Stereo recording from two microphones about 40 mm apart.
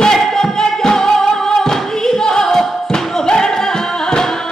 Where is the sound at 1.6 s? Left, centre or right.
Centre.